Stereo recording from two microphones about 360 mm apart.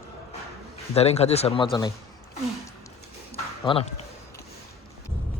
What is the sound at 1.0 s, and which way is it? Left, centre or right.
Speech, centre.